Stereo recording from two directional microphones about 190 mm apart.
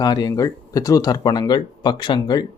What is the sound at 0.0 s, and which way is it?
Speech, 20° left (ahead or behind).